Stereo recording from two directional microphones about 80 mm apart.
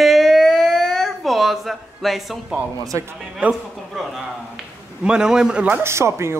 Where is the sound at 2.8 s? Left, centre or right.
Right.